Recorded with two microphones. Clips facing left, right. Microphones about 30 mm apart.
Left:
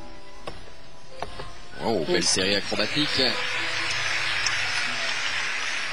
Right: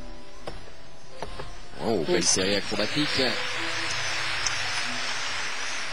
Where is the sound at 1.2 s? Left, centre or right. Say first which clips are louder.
Left 2 dB; left.